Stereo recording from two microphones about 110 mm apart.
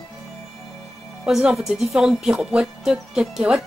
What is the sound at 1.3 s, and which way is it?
Speech, 5° right (ahead or behind).